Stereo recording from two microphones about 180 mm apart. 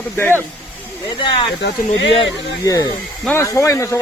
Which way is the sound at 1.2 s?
25° left (ahead or behind).